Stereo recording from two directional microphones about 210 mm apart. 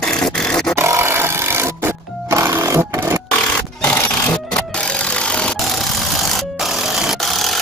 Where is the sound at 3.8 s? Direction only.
5° left (ahead or behind).